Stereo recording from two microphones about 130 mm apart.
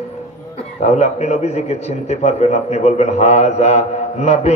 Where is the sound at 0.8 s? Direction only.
60° left (ahead or behind).